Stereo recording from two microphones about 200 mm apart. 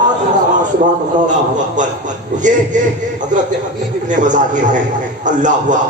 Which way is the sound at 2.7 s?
40° right (ahead or behind).